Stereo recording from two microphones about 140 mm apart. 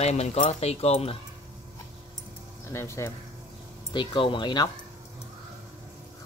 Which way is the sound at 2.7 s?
20° left (ahead or behind).